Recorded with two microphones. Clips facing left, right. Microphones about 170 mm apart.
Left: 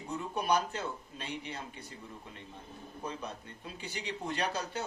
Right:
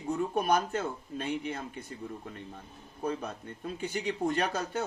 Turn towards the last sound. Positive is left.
turn(degrees=-50)  # may be behind; listen again after turning